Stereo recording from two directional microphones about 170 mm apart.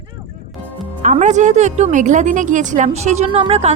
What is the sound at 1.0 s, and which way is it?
Speech, 45° right (ahead or behind).